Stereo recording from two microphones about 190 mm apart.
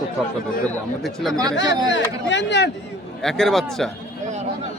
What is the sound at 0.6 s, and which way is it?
Speech, centre (ahead or behind).